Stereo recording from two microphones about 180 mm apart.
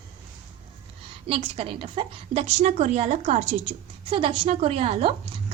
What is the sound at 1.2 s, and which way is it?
A woman's voice, 30° right (ahead or behind).